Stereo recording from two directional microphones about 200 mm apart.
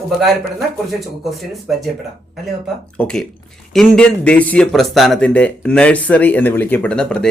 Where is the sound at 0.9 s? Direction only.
Centre (ahead or behind).